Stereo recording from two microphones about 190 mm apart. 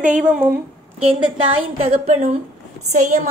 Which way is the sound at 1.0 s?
30° right (ahead or behind).